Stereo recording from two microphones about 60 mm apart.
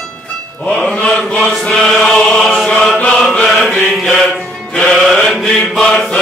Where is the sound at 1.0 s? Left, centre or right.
Centre.